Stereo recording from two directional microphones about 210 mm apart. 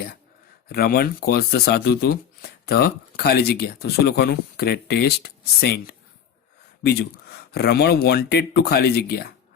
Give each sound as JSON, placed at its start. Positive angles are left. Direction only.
{"t": 0.7, "sound": "speech", "side_deg": 50}